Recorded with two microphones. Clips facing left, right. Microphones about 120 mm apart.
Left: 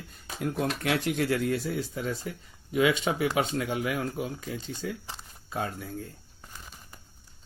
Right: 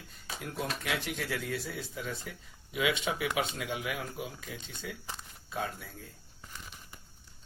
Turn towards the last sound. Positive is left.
turn(degrees=45)  # may be behind; listen again after turning